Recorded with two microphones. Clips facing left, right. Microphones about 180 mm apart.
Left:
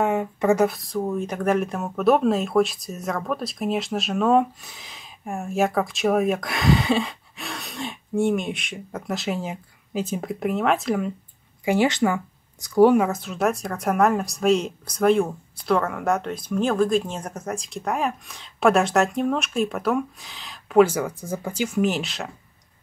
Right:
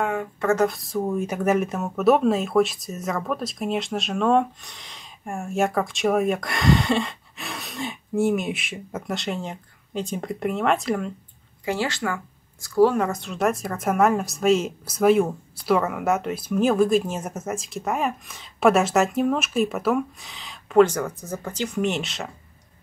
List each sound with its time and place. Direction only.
0.0 s speech: 20° left (ahead or behind)
0.7 s speech: centre (ahead or behind)
11.6 s speech: 15° left (ahead or behind); by 22.3 s centre (ahead or behind)